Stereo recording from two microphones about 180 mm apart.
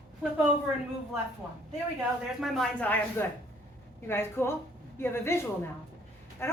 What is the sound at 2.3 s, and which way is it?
A woman's voice, centre (ahead or behind).